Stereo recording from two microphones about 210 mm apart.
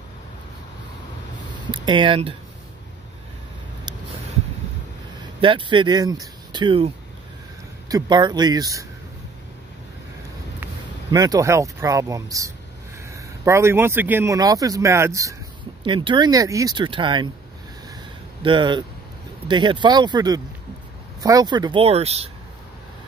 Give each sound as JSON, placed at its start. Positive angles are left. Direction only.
{"t": 1.7, "sound": "speech", "side_deg": -25}
{"t": 5.4, "sound": "speech", "side_deg": -25}
{"t": 7.9, "sound": "speech", "side_deg": -20}
{"t": 10.6, "sound": "speech", "side_deg": -20}
{"t": 18.4, "sound": "speech", "side_deg": -20}